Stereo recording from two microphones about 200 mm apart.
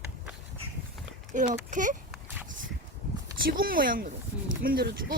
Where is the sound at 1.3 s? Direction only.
40° right (ahead or behind).